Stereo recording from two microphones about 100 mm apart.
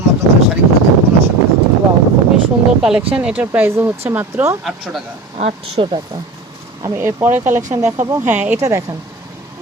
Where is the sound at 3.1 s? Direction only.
15° right (ahead or behind).